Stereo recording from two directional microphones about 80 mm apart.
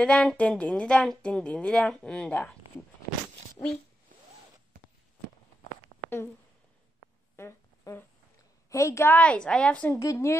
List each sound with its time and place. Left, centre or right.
0.0 s speech: centre
3.6 s speech: left
6.0 s speech: left
7.3 s a sound: left
8.6 s a woman's voice: left
9.1 s speech: centre
9.9 s speech: left